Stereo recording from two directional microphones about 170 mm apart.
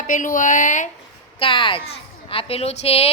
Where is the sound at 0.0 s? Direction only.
50° left (ahead or behind).